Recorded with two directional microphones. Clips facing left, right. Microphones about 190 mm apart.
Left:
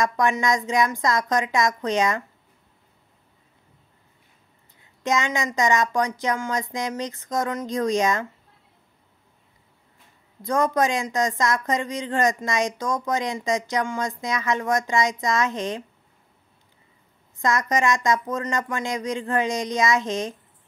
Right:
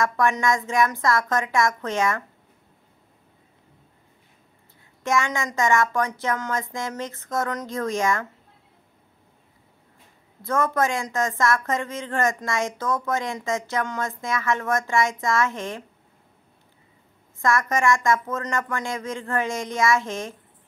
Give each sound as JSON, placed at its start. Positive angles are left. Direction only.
{"t": 0.0, "sound": "speech", "side_deg": 15}
{"t": 5.0, "sound": "speech", "side_deg": 20}
{"t": 10.4, "sound": "speech", "side_deg": 15}
{"t": 17.4, "sound": "speech", "side_deg": 20}